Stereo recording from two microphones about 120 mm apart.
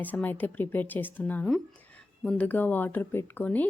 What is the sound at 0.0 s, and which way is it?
A woman's voice, 15° left (ahead or behind).